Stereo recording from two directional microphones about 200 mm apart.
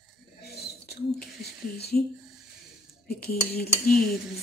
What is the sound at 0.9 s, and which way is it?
Speech, 55° left (ahead or behind).